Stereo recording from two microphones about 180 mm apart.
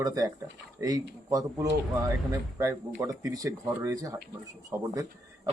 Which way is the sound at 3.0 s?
15° right (ahead or behind).